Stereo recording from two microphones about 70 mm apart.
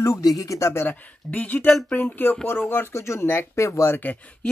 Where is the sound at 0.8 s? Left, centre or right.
Left.